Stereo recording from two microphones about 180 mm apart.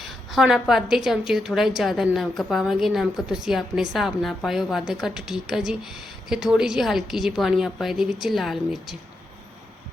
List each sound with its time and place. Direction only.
0.3 s a woman's voice: centre (ahead or behind)